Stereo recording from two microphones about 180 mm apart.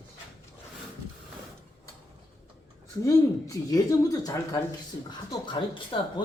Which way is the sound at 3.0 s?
20° left (ahead or behind).